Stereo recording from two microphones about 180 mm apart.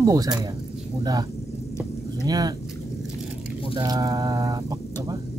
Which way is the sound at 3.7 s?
20° right (ahead or behind).